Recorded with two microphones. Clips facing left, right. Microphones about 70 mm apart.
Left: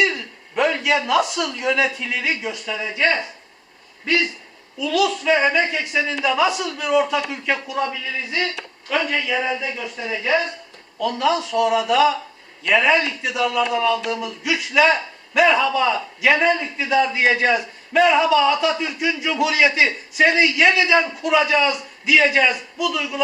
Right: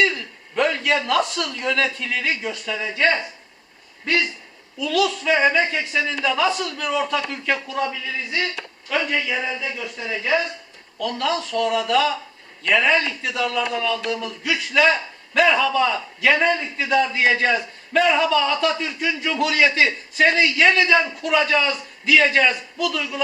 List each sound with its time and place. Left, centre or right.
0.0 s a man's voice: centre
4.8 s a man's voice: centre
8.9 s speech: centre
9.3 s a man's voice: centre
10.1 s speech: centre
11.0 s a man's voice: centre